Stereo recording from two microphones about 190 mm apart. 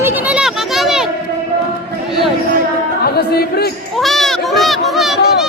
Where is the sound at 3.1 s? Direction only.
55° left (ahead or behind).